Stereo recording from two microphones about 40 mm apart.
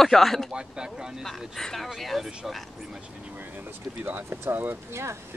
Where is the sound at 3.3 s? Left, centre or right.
Right.